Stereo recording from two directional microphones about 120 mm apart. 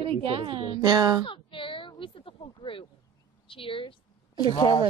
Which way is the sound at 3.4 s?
45° left (ahead or behind).